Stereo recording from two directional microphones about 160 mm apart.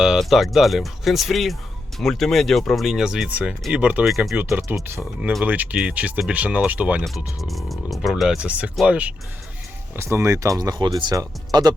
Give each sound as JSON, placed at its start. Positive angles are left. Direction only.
{"t": 0.0, "sound": "speech", "side_deg": 0}
{"t": 4.4, "sound": "speech", "side_deg": -15}